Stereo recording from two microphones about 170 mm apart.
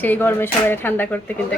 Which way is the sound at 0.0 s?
10° left (ahead or behind).